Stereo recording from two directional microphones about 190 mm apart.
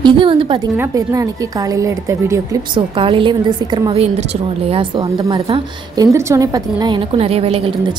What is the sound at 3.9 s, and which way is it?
A woman's voice, 35° right (ahead or behind).